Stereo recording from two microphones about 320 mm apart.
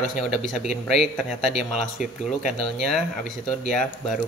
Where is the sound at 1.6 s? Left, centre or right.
Centre.